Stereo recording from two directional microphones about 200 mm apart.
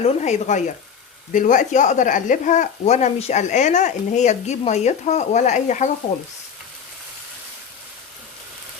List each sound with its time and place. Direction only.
0.0 s speech: 30° left (ahead or behind)